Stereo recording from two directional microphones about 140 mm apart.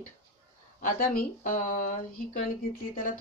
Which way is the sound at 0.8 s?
85° left.